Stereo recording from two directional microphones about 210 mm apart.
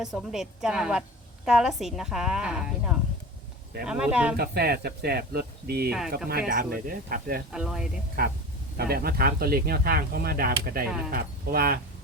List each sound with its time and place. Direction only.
0.0 s a woman's voice: centre (ahead or behind)
4.4 s speech: 50° right (ahead or behind)
7.5 s a woman's voice: 5° right (ahead or behind)
8.2 s speech: 45° right (ahead or behind)